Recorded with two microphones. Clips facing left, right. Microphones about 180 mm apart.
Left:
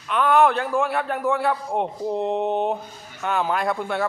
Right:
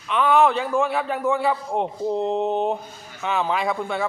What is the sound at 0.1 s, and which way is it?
A man's voice, centre (ahead or behind).